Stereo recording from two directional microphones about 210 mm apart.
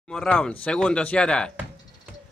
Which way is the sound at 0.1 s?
5° left (ahead or behind).